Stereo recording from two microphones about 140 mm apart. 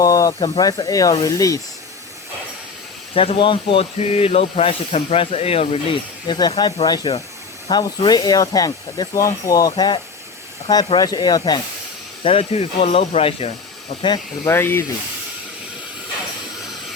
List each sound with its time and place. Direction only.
0.0 s speech: 25° left (ahead or behind)
3.2 s speech: 40° left (ahead or behind)
12.2 s speech: 45° left (ahead or behind)
14.4 s speech: 15° left (ahead or behind)